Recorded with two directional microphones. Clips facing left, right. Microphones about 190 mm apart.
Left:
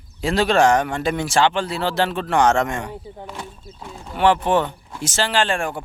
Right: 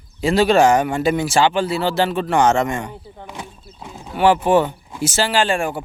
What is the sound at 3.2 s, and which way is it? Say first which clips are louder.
Speech: even; 15° right (ahead or behind).